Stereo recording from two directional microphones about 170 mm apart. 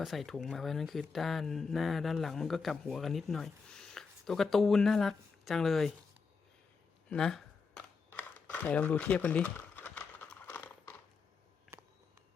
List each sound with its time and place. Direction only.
0.0 s speech: centre (ahead or behind)
7.1 s camera: 5° left (ahead or behind)
11.7 s a sound: 15° right (ahead or behind)